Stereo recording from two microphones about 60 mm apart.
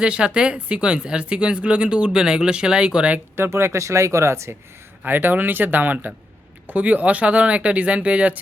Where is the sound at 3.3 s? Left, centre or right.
Right.